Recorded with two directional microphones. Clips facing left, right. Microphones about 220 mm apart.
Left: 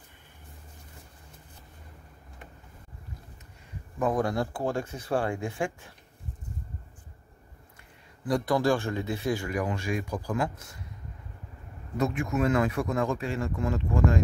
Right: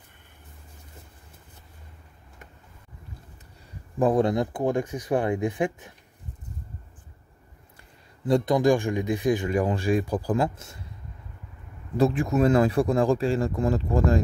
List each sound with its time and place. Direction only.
4.0 s a man's voice: 25° right (ahead or behind)
8.3 s a man's voice: 20° right (ahead or behind)
12.0 s speech: 35° right (ahead or behind)